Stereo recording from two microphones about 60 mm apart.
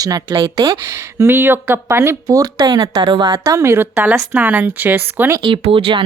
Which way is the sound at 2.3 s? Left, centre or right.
Right.